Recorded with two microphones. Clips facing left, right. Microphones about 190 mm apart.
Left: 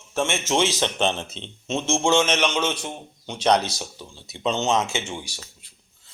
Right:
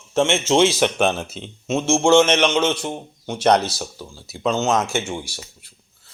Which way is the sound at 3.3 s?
10° right (ahead or behind).